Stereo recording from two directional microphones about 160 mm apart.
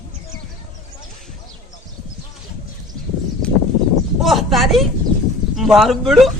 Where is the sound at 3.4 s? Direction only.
5° left (ahead or behind).